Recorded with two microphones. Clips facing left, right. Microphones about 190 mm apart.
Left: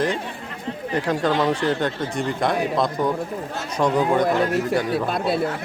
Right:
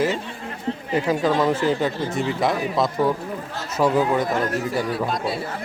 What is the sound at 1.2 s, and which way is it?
Speech, centre (ahead or behind).